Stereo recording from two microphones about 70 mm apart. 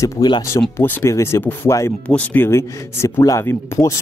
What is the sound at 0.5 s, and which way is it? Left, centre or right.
Speech, left.